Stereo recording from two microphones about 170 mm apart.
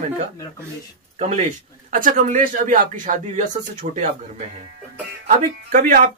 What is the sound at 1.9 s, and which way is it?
Speech, 50° right (ahead or behind).